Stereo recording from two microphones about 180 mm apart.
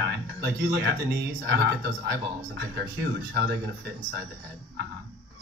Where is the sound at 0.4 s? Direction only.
65° right (ahead or behind).